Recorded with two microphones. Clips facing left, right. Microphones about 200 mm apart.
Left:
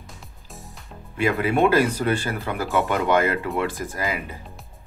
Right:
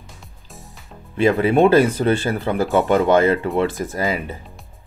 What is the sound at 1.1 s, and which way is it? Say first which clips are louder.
Speech: right 6 dB; 30° right (ahead or behind).